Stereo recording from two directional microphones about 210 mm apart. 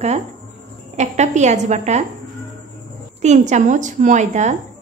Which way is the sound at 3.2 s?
35° right (ahead or behind).